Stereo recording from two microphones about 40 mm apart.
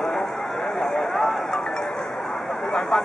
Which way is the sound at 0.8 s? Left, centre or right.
Centre.